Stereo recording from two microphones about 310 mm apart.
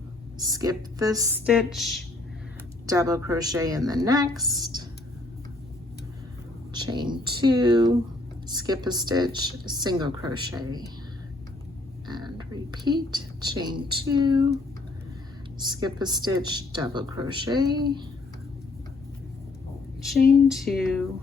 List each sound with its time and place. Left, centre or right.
0.3 s speech: centre
6.7 s speech: centre
12.0 s a woman's voice: centre
15.5 s speech: centre
20.5 s speech: centre